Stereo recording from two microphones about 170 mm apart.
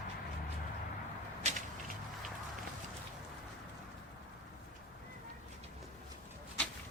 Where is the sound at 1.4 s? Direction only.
40° right (ahead or behind).